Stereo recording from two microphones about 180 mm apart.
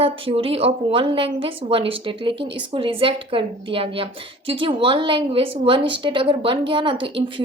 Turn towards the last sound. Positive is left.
turn(degrees=-25)  # may be behind; listen again after turning